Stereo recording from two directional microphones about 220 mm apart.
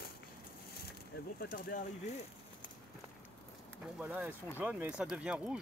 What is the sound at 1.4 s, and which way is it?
Speech, 40° left (ahead or behind).